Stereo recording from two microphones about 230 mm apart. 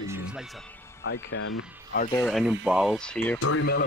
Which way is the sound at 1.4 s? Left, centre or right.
Left.